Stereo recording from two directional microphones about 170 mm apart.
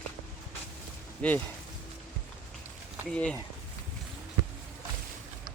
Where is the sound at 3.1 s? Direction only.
5° left (ahead or behind).